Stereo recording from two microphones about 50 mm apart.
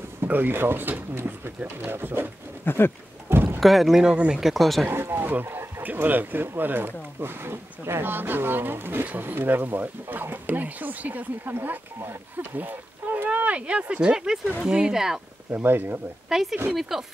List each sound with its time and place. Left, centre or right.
0.2 s speech: right
1.9 s speech: right
2.6 s speech: left
3.3 s rowboat: right
3.6 s speech: centre
4.0 s speech: centre
4.4 s speech: centre
5.2 s speech: right
14.1 s speech: centre
15.5 s speech: right
16.3 s speech: centre